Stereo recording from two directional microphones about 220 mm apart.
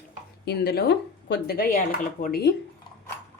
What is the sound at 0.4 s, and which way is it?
Speech, 50° left (ahead or behind).